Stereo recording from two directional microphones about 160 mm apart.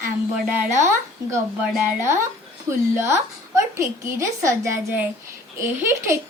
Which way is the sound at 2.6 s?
15° right (ahead or behind).